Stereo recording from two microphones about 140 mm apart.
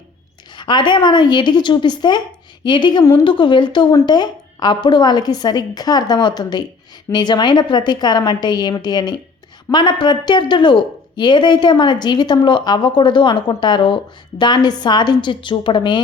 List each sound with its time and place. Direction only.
0.5 s a woman's voice: 35° left (ahead or behind)